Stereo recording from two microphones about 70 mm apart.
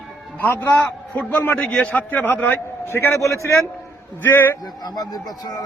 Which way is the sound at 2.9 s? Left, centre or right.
Left.